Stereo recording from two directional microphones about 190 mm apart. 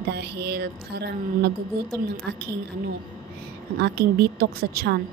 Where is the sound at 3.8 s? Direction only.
55° right (ahead or behind).